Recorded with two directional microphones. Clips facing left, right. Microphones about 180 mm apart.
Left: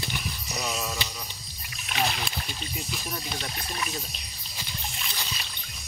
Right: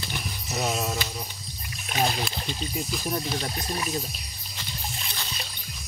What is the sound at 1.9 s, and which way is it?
Speech, 40° right (ahead or behind).